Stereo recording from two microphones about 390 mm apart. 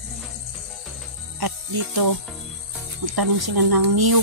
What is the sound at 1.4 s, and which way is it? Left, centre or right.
Music, right.